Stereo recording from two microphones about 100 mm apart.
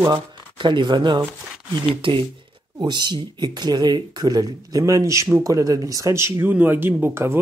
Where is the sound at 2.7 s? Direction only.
50° right (ahead or behind).